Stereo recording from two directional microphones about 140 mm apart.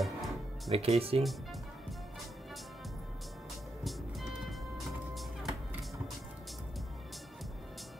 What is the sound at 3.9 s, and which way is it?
Music, centre (ahead or behind).